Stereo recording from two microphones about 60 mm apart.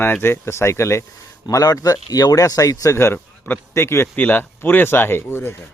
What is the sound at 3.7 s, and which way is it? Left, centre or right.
Speech, left.